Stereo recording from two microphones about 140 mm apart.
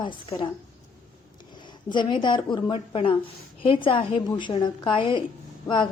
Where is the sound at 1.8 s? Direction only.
35° left (ahead or behind).